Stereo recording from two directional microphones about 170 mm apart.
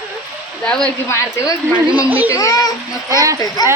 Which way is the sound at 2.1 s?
10° right (ahead or behind).